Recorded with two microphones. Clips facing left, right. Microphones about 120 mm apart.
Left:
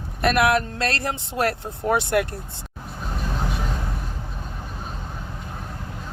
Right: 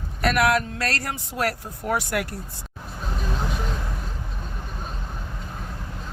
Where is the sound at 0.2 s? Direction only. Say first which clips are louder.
Left 2 dB; 25° left (ahead or behind).